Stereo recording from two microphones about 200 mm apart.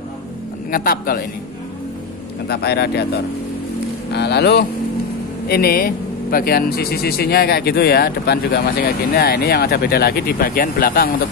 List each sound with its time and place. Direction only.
0.7 s speech: 45° left (ahead or behind)
2.4 s speech: 55° left (ahead or behind)
4.1 s speech: 55° left (ahead or behind)